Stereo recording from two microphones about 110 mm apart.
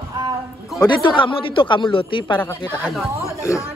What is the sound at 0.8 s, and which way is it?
Speech, 45° left (ahead or behind).